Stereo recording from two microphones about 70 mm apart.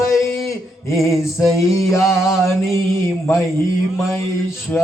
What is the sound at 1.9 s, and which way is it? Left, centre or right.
Male singing, left.